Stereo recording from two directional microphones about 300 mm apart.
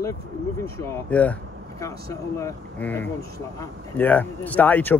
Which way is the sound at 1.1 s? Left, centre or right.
Centre.